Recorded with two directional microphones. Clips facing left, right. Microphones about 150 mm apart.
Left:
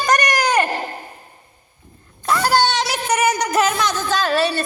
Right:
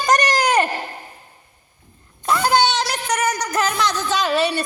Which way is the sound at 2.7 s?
Centre (ahead or behind).